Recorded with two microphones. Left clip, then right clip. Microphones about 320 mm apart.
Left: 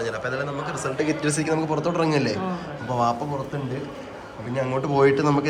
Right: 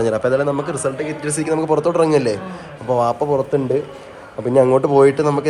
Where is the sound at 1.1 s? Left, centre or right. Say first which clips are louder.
Right 3 dB; centre.